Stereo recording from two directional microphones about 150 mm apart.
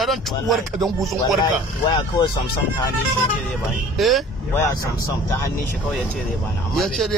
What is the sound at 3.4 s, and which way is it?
Speech, centre (ahead or behind).